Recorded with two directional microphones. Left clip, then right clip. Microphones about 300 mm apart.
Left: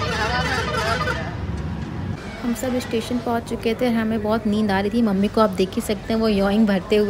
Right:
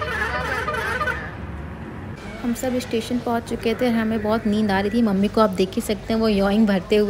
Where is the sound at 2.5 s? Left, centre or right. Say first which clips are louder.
Even; centre.